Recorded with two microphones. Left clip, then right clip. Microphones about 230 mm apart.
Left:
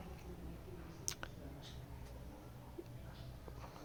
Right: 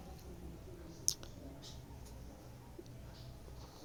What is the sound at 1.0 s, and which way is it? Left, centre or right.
Clicking, left.